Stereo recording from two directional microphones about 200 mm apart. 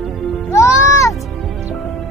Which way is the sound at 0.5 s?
15° left (ahead or behind).